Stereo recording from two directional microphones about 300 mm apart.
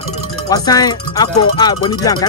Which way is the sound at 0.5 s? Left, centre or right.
Centre.